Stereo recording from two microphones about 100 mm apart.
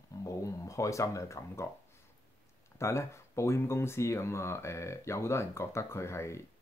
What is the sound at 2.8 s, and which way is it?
Speech, 30° left (ahead or behind).